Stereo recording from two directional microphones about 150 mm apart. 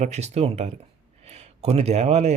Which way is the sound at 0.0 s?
50° right (ahead or behind).